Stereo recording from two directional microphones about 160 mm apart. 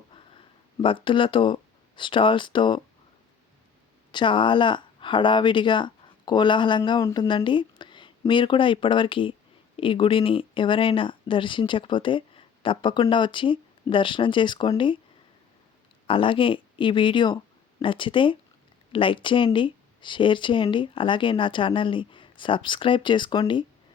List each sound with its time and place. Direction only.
0.1 s speech: 35° left (ahead or behind)
4.1 s speech: 30° left (ahead or behind)
16.0 s speech: 35° left (ahead or behind)